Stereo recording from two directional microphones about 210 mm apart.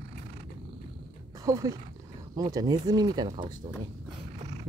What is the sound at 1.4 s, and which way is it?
Speech, 15° right (ahead or behind).